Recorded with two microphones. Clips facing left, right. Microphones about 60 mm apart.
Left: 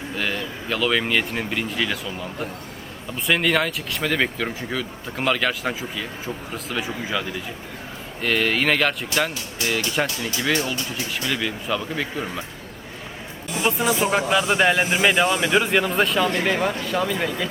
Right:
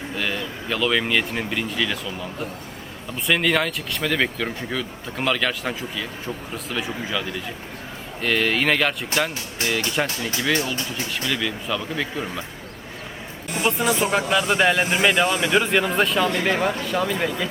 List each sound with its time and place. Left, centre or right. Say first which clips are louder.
0.2 s speech: even; centre
8.2 s speech: even; centre
9.6 s speech: even; right
10.0 s speech: left 1 dB; centre
11.3 s speech: left 1 dB; centre
13.7 s speech: even; centre